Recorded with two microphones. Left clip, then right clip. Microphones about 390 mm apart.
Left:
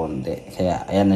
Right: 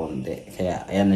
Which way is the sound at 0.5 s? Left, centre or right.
Centre.